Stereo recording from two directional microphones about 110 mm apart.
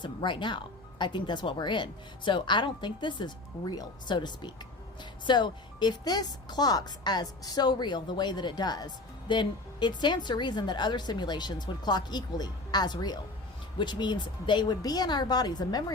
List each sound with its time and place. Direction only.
0.0 s a woman's voice: 45° left (ahead or behind)